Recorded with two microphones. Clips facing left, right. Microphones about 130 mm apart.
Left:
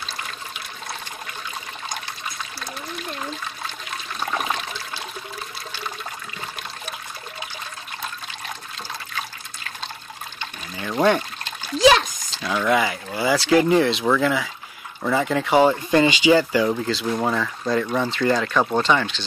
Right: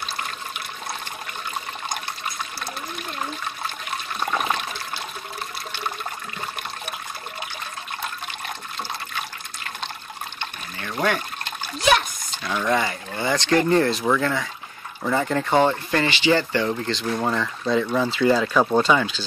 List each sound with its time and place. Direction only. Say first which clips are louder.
10.8 s pour: left 5 dB; 20° left (ahead or behind)
11.8 s a sound: left 5 dB; 90° left
12.6 s speech: left 2 dB; 5° left (ahead or behind)